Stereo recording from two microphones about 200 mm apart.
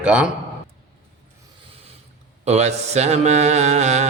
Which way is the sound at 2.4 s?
35° right (ahead or behind).